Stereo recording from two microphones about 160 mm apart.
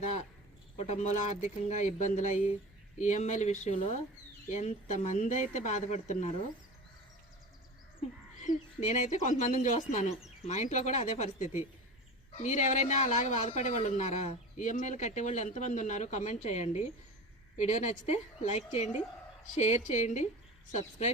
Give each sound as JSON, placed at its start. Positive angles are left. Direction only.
{"t": 0.8, "sound": "speech", "side_deg": 45}
{"t": 8.4, "sound": "speech", "side_deg": 50}